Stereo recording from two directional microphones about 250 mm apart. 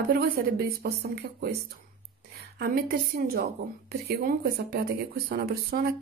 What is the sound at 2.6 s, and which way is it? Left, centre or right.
A woman's voice, right.